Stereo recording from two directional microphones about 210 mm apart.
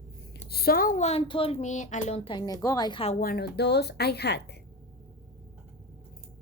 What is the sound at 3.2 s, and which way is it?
A woman's voice, 45° left (ahead or behind).